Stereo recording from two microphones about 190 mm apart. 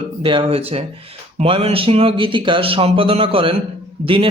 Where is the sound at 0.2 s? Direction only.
25° right (ahead or behind).